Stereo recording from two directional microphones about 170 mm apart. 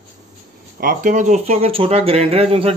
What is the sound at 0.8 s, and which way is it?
Speech, 55° right (ahead or behind).